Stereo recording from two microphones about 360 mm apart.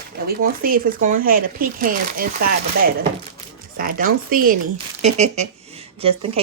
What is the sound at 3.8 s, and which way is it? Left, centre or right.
A woman's voice, right.